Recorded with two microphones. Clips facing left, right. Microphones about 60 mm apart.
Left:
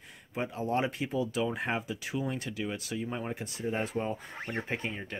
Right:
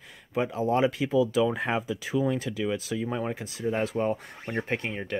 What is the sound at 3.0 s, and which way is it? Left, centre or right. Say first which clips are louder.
Speech: right 5 dB; right.